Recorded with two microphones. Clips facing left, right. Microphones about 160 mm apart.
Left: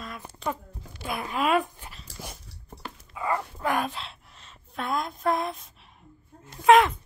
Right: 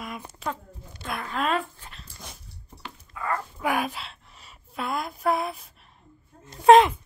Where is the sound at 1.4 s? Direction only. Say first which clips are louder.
Left 3 dB; 15° left (ahead or behind).